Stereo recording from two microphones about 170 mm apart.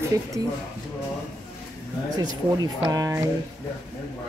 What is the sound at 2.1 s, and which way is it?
Speech, 25° right (ahead or behind).